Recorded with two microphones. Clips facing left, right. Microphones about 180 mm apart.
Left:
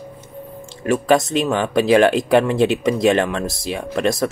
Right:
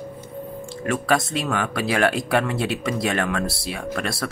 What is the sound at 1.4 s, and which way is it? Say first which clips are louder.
Speech: left 7 dB; 25° left (ahead or behind).